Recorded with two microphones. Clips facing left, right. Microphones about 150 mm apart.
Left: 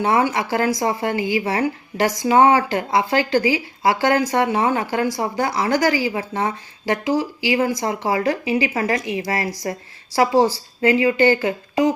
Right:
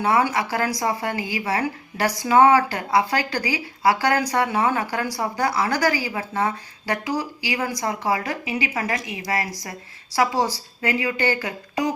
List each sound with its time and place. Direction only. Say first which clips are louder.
0.0 s speech: left 2 dB; 25° left (ahead or behind)